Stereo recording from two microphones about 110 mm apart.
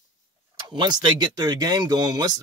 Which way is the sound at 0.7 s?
45° right (ahead or behind).